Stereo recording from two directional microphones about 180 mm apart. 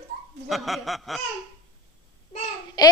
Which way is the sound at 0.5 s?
Centre (ahead or behind).